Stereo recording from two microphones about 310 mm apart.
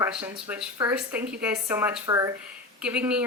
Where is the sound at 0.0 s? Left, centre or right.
Centre.